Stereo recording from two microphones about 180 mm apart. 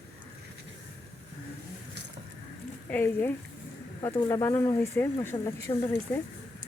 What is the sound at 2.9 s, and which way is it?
Speech, 10° left (ahead or behind).